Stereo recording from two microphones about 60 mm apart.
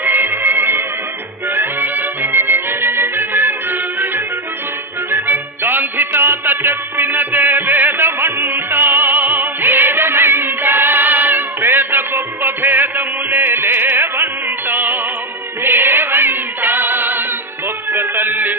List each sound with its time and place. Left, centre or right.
0.0 s music: right